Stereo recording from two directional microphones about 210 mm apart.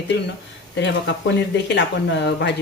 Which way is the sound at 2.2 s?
55° left (ahead or behind).